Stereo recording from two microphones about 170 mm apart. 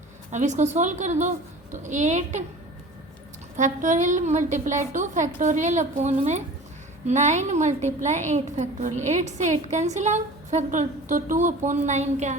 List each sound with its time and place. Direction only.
0.3 s a woman's voice: 45° right (ahead or behind)
3.6 s a woman's voice: 45° right (ahead or behind)